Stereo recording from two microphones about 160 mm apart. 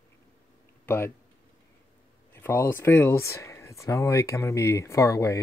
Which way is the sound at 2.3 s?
15° left (ahead or behind).